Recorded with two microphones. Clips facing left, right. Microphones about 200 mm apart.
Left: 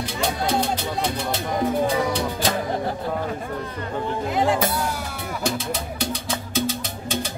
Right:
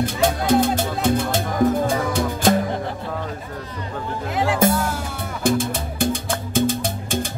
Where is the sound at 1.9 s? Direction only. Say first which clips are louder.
Right 1 dB; 50° right (ahead or behind).